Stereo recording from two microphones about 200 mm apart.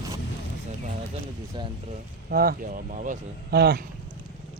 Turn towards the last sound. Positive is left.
turn(degrees=-50)  # may be behind; listen again after turning